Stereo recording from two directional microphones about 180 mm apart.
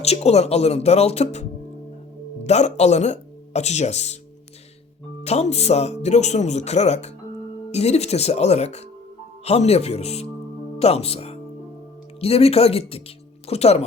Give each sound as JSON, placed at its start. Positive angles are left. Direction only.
{"t": 0.0, "sound": "speech", "side_deg": 35}
{"t": 5.2, "sound": "speech", "side_deg": 35}